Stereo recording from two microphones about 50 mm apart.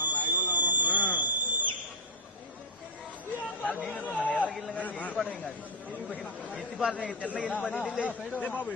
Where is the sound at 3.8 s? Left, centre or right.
Left.